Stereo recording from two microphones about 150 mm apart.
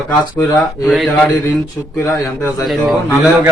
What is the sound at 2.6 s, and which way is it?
Speech, centre (ahead or behind).